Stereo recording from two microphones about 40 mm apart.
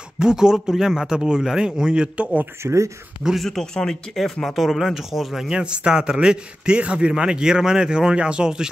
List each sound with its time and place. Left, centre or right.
0.2 s a man's voice: centre
2.6 s speech: right
3.4 s speech: centre
5.5 s a man's voice: right